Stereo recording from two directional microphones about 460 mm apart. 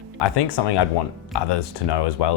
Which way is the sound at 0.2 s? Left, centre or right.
Left.